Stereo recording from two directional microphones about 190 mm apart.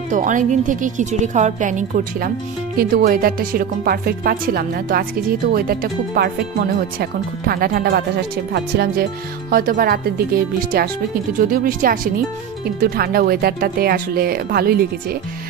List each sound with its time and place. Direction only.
0.1 s speech: 40° right (ahead or behind)
11.3 s speech: 50° right (ahead or behind)